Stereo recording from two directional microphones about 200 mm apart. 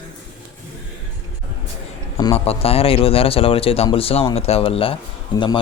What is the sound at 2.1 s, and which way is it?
Speech, 30° left (ahead or behind).